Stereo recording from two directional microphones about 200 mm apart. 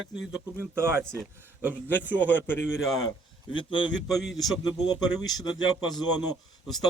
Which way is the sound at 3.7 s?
25° left (ahead or behind).